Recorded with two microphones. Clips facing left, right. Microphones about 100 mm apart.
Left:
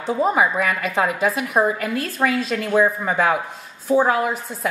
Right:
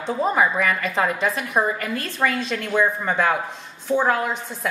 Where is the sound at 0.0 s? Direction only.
5° left (ahead or behind).